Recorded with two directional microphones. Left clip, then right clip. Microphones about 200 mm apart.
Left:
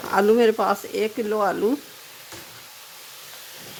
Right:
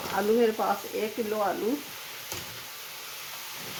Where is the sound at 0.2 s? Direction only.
60° left (ahead or behind).